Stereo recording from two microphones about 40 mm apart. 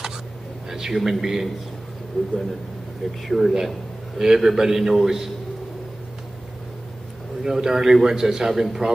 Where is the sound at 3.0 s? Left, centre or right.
Centre.